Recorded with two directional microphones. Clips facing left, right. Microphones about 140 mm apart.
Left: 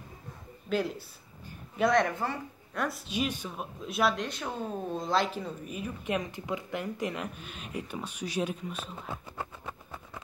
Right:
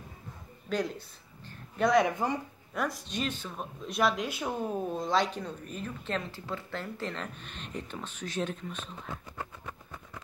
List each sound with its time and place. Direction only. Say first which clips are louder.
0.7 s speech: left 1 dB; 5° left (ahead or behind); by 2.3 s 10° right (ahead or behind)
2.7 s speech: even; centre (ahead or behind)
9.4 s a sound: left 2 dB; 25° left (ahead or behind)